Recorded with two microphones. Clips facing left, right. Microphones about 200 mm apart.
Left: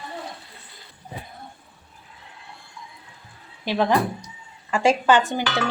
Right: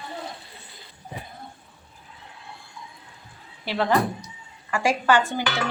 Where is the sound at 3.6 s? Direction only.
15° left (ahead or behind).